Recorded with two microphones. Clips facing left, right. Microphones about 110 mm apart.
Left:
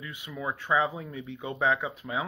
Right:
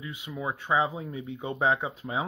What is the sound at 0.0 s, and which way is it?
Speech, 25° right (ahead or behind).